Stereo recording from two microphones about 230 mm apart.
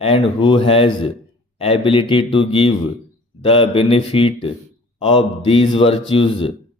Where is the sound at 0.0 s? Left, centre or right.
Left.